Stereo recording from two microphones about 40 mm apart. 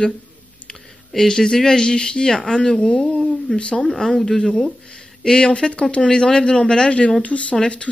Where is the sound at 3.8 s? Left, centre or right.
Centre.